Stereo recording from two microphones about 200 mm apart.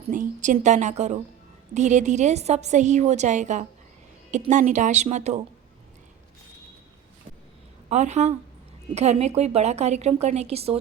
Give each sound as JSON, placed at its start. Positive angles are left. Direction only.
{"t": 0.1, "sound": "a woman's voice", "side_deg": -40}
{"t": 7.9, "sound": "a woman's voice", "side_deg": -35}